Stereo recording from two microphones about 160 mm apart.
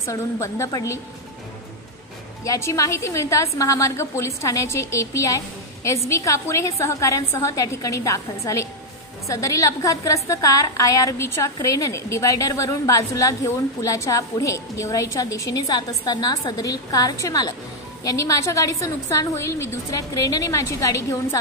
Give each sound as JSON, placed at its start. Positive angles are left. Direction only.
{"t": 0.0, "sound": "a woman's voice", "side_deg": 20}
{"t": 2.4, "sound": "a woman's voice", "side_deg": 20}